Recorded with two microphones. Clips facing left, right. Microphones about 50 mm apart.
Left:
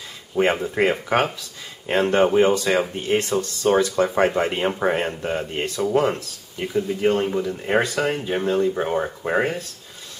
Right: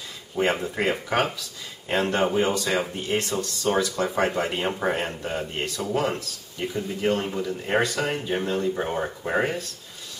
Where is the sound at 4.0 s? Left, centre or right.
Left.